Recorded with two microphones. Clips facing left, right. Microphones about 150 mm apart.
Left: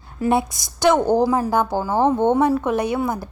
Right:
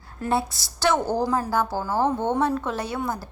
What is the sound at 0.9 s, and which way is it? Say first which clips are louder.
Speech: left 6 dB; 55° left (ahead or behind).